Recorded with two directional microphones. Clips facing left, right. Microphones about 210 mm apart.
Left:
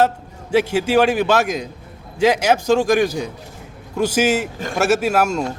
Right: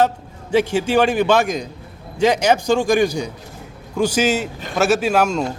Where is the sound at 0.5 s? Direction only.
5° left (ahead or behind).